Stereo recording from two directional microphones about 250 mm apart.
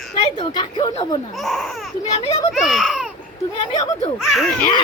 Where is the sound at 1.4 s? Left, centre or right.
Centre.